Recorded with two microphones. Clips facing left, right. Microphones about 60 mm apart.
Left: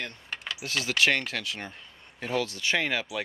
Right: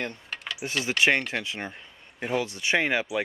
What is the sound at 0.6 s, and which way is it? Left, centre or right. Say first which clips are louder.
Speech: right 1 dB; right.